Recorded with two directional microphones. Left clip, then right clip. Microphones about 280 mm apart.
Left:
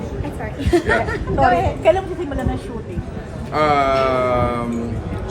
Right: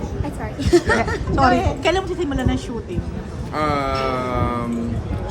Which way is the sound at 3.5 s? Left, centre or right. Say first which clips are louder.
Left 5 dB; centre.